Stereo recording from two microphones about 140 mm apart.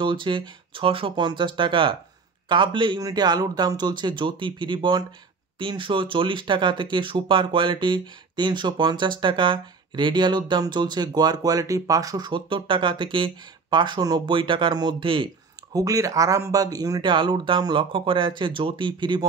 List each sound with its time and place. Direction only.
0.0 s speech: 35° right (ahead or behind)
15.7 s speech: 25° right (ahead or behind)